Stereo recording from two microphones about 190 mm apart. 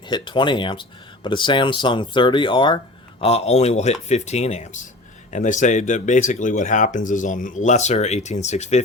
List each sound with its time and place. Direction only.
0.1 s speech: 25° left (ahead or behind)